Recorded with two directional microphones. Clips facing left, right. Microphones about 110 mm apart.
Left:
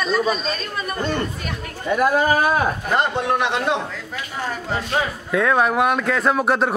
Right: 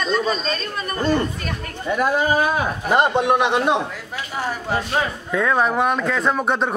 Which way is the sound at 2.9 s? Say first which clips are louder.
Right 6 dB; 20° right (ahead or behind).